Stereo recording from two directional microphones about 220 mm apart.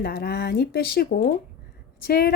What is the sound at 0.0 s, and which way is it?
A woman's voice, 45° left (ahead or behind).